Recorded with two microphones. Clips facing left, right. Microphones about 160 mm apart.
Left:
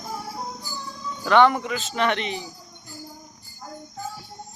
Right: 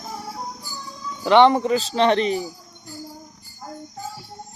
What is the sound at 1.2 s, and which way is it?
Speech, 25° right (ahead or behind).